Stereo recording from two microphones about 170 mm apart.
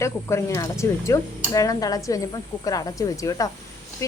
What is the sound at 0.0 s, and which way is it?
Speech, 15° left (ahead or behind).